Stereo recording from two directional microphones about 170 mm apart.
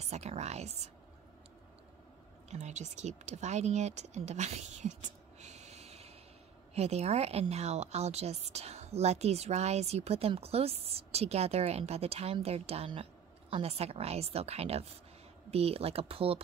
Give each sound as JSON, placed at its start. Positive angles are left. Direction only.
{"t": 0.0, "sound": "a woman's voice", "side_deg": -40}
{"t": 2.5, "sound": "a woman's voice", "side_deg": -45}